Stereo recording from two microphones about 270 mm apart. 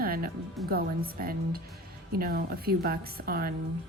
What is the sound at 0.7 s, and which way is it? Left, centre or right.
Speech, right.